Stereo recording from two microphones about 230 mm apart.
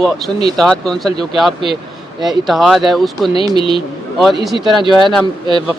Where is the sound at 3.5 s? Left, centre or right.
Left.